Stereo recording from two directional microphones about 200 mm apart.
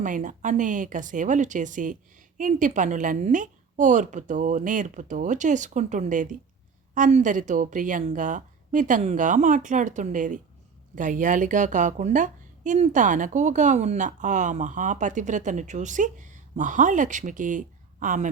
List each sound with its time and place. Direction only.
0.0 s a woman's voice: 40° right (ahead or behind)